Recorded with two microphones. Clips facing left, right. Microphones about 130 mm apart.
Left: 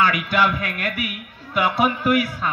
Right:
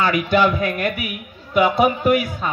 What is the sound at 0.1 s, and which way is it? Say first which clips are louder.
A man's voice: right 4 dB; 30° right (ahead or behind).